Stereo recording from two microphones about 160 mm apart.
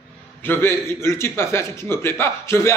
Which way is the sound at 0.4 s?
15° left (ahead or behind).